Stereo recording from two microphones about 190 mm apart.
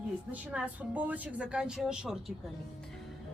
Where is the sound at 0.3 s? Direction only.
5° right (ahead or behind).